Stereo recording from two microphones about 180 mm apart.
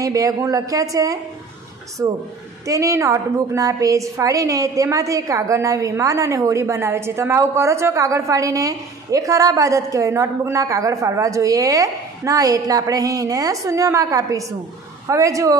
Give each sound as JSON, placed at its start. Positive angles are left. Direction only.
{"t": 0.0, "sound": "a woman's voice", "side_deg": -20}